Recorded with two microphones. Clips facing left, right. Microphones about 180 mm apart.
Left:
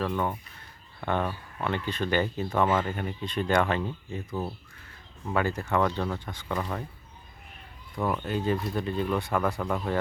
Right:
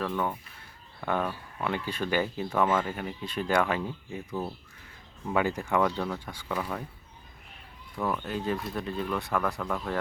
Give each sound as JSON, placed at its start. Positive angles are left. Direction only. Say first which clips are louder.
{"t": 0.0, "sound": "speech", "louder": "left 1 dB", "side_deg": 10}
{"t": 1.7, "sound": "speech", "louder": "left 2 dB", "side_deg": -10}
{"t": 5.3, "sound": "speech", "louder": "even", "side_deg": -15}
{"t": 7.9, "sound": "speech", "louder": "left 2 dB", "side_deg": 10}
{"t": 8.2, "sound": "speech", "louder": "left 3 dB", "side_deg": 0}